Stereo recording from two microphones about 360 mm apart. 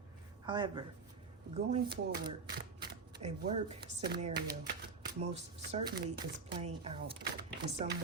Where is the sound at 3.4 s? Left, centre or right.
Right.